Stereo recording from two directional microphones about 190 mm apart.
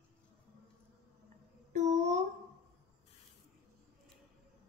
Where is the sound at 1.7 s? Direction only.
40° right (ahead or behind).